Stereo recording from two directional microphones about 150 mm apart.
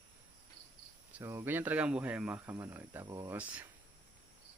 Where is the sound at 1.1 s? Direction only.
15° right (ahead or behind).